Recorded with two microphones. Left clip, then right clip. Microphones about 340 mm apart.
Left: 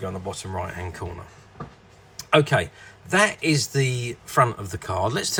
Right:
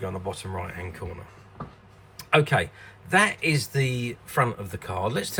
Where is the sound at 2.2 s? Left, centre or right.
Centre.